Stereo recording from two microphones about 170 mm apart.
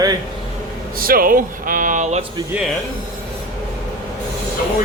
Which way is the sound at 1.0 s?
60° right (ahead or behind).